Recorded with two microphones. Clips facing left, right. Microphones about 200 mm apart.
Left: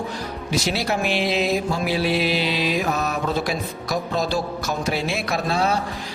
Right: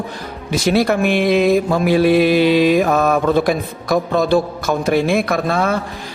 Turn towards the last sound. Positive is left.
turn(degrees=-55)  # may be behind; listen again after turning